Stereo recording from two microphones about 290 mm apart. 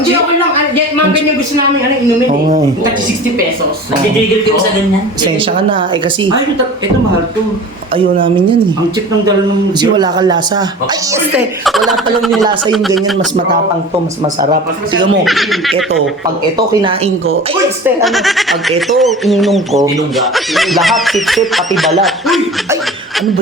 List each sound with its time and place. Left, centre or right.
5.2 s a woman's voice: centre
9.8 s a woman's voice: centre
11.1 s speech: centre
12.4 s a woman's voice: centre
15.2 s speech: centre
17.8 s speech: centre